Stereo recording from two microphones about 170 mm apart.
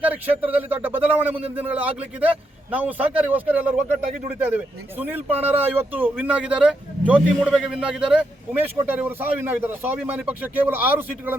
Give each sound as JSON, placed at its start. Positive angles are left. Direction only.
{"t": 0.0, "sound": "speech", "side_deg": -10}
{"t": 1.4, "sound": "a man's voice", "side_deg": -35}
{"t": 1.6, "sound": "speech", "side_deg": -10}